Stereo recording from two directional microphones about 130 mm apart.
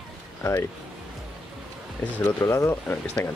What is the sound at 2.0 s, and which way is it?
Speech, 10° left (ahead or behind).